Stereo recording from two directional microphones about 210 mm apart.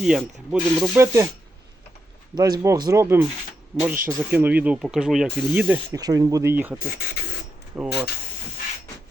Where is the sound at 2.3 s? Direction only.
20° right (ahead or behind).